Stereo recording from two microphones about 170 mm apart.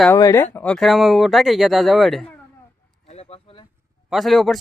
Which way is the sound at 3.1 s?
35° left (ahead or behind).